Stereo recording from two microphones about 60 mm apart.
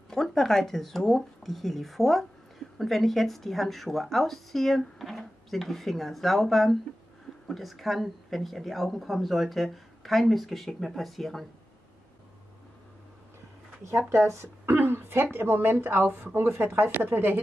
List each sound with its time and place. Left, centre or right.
0.1 s speech: centre
13.8 s speech: right
14.7 s a sound: right
15.3 s speech: right